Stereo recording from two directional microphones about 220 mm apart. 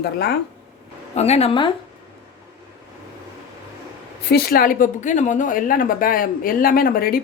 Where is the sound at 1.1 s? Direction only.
30° left (ahead or behind).